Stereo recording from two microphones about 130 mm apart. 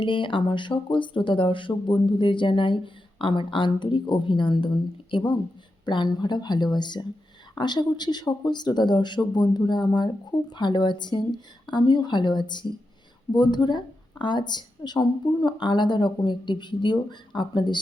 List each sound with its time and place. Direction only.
0.0 s speech: 40° left (ahead or behind)